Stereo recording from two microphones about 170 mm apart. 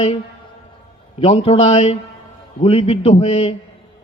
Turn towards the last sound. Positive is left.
turn(degrees=35)  # may be behind; listen again after turning